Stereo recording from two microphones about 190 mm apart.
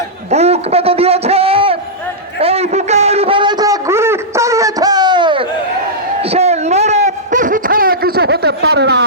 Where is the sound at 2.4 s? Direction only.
35° right (ahead or behind).